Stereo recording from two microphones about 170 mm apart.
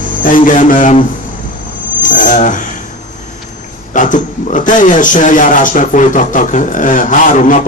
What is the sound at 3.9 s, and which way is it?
A man's voice, 50° left (ahead or behind).